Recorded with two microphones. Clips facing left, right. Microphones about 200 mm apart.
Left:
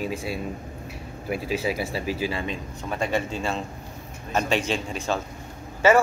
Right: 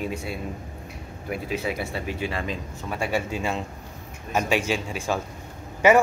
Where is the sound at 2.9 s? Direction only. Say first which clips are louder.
Left 1 dB; 10° right (ahead or behind).